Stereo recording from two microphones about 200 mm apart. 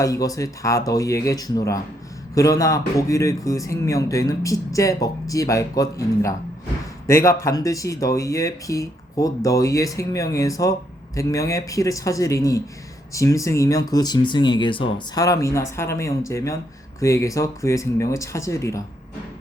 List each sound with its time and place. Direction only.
0.0 s speech: 15° left (ahead or behind)